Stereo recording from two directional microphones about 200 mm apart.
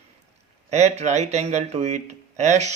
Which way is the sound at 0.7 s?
35° right (ahead or behind).